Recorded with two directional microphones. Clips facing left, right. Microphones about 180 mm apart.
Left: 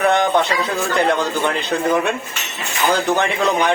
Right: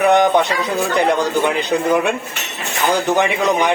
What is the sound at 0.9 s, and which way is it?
Speech, 15° right (ahead or behind).